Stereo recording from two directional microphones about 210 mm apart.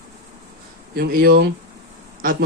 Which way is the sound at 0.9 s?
45° right (ahead or behind).